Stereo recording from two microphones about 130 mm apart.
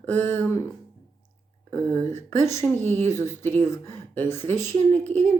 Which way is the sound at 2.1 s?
20° left (ahead or behind).